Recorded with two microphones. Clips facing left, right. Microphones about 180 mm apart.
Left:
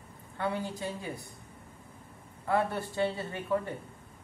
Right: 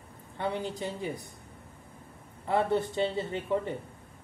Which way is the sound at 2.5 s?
20° right (ahead or behind).